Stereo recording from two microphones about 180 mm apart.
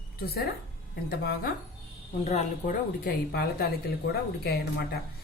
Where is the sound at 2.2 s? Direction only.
40° left (ahead or behind).